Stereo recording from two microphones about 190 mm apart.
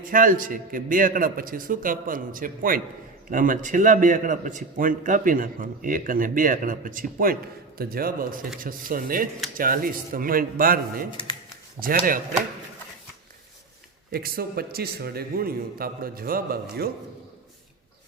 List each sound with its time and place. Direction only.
0.0 s a man's voice: 45° right (ahead or behind)
14.1 s a man's voice: 50° right (ahead or behind)